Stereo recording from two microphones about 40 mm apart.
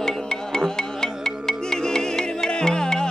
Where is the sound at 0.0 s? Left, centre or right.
Centre.